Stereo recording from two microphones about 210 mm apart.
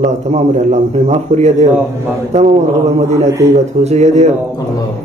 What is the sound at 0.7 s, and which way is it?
Speech, 30° right (ahead or behind).